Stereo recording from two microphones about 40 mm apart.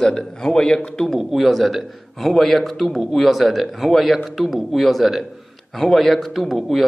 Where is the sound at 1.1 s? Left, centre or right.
Centre.